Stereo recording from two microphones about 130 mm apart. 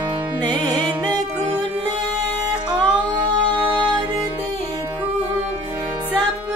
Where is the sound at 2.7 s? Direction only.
35° right (ahead or behind).